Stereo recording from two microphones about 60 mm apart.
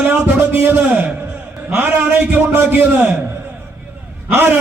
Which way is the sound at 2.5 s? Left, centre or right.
Right.